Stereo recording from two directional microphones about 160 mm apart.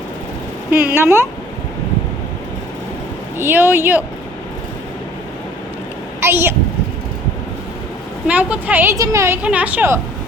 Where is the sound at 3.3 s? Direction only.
15° right (ahead or behind).